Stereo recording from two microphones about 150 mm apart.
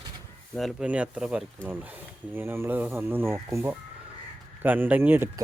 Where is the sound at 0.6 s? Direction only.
5° right (ahead or behind).